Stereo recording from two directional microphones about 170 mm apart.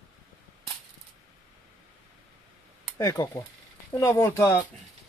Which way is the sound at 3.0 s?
20° left (ahead or behind).